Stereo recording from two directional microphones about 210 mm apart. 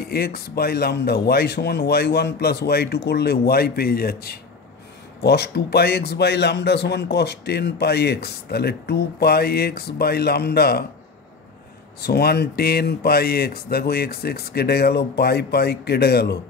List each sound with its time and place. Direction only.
0.1 s a man's voice: 45° left (ahead or behind)
12.0 s a man's voice: 50° left (ahead or behind)